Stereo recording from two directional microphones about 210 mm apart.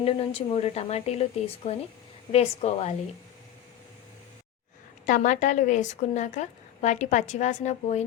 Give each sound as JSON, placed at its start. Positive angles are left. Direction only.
{"t": 0.0, "sound": "a woman's voice", "side_deg": 25}
{"t": 5.0, "sound": "a woman's voice", "side_deg": 40}